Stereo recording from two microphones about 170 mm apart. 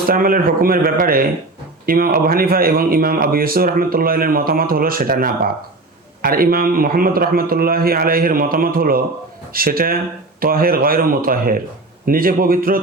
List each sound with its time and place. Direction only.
0.1 s speech: 55° right (ahead or behind)